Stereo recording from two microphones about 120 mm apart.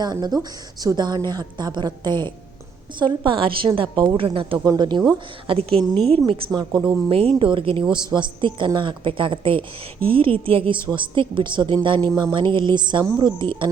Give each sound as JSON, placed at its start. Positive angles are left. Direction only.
{"t": 0.0, "sound": "a woman's voice", "side_deg": -35}
{"t": 4.6, "sound": "speech", "side_deg": -35}
{"t": 5.5, "sound": "a woman's voice", "side_deg": -50}
{"t": 6.5, "sound": "speech", "side_deg": -30}
{"t": 6.8, "sound": "a woman's voice", "side_deg": -50}